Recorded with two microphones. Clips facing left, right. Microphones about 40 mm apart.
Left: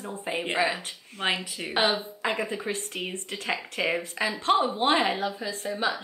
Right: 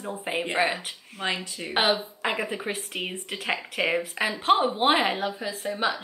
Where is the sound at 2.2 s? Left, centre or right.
Centre.